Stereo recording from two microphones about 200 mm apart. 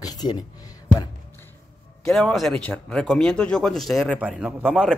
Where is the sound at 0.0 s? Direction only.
20° left (ahead or behind).